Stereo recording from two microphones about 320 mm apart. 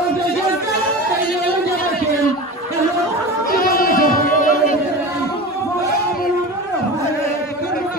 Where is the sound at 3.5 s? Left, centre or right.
Left.